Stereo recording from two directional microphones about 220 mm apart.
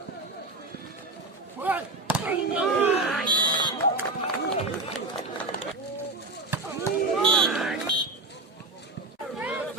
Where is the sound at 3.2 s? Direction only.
20° right (ahead or behind).